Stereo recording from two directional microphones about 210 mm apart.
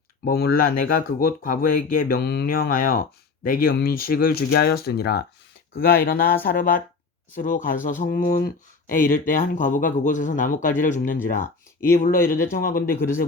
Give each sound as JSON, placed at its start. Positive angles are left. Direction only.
{"t": 0.3, "sound": "speech", "side_deg": 45}